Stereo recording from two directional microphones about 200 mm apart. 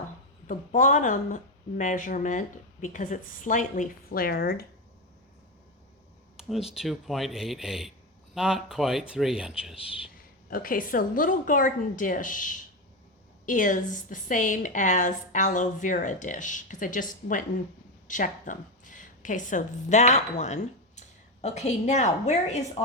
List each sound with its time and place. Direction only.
0.4 s a woman's voice: 40° left (ahead or behind)
6.3 s speech: 5° right (ahead or behind)
10.5 s a woman's voice: 45° left (ahead or behind)